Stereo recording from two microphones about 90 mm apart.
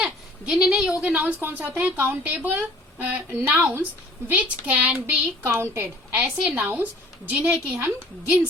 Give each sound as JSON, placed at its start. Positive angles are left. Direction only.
{"t": 0.0, "sound": "a sound", "side_deg": -10}
{"t": 1.0, "sound": "a woman's voice", "side_deg": -15}
{"t": 6.1, "sound": "speech", "side_deg": -15}